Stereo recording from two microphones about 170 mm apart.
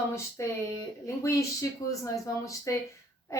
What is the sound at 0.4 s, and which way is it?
A woman's voice, 15° left (ahead or behind).